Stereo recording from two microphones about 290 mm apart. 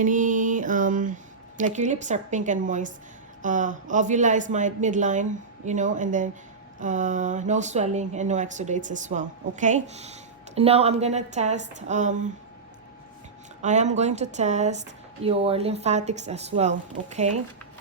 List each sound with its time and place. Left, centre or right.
0.0 s speech: right
13.6 s speech: right